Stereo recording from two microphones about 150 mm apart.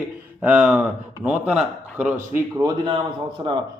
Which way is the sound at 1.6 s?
55° right (ahead or behind).